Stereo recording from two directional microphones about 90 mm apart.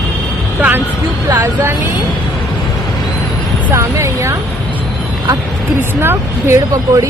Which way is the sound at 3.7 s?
35° right (ahead or behind).